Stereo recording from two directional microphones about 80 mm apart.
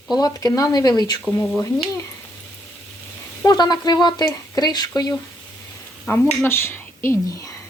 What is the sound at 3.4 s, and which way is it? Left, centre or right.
Speech, left.